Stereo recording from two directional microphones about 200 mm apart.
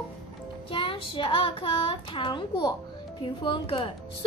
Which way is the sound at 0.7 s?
25° left (ahead or behind).